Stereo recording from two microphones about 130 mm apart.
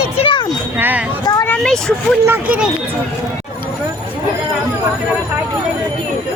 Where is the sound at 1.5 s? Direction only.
5° left (ahead or behind).